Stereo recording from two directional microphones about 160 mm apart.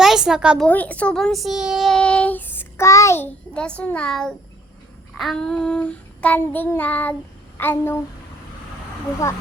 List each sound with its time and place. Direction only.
0.0 s a woman's voice: 5° right (ahead or behind)
0.7 s a child's voice: 10° left (ahead or behind)